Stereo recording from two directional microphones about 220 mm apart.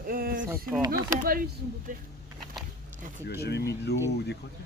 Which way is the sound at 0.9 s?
40° right (ahead or behind).